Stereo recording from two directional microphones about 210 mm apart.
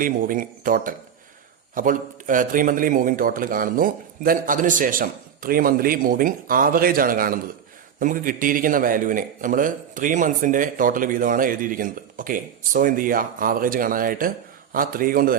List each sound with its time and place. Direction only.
0.0 s a man's voice: 40° right (ahead or behind)